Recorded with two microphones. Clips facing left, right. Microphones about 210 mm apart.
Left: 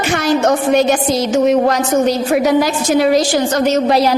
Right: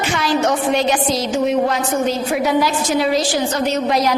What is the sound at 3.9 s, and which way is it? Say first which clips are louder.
Speech: left 4 dB; 30° left (ahead or behind).